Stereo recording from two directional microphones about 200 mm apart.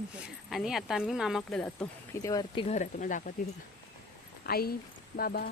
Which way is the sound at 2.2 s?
20° left (ahead or behind).